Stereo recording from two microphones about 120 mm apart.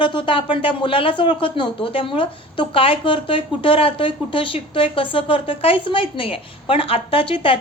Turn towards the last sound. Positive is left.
turn(degrees=50)  # may be behind; listen again after turning